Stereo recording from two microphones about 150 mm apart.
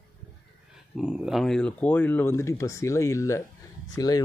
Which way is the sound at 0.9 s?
5° right (ahead or behind).